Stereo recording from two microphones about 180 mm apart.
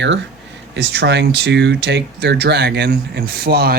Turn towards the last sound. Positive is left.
turn(degrees=-60)  # may be behind; listen again after turning